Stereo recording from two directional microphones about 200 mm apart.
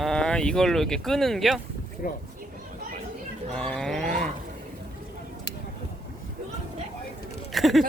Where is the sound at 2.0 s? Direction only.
45° left (ahead or behind).